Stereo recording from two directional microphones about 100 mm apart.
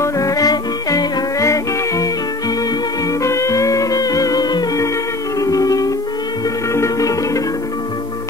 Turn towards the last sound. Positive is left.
turn(degrees=30)  # may be behind; listen again after turning